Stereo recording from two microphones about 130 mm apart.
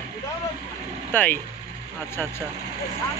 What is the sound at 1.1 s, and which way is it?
Speech, 15° left (ahead or behind).